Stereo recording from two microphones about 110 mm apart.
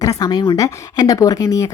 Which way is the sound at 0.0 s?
35° left (ahead or behind).